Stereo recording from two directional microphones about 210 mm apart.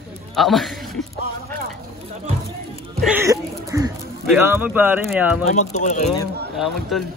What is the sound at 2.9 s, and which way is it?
Speech, 5° right (ahead or behind).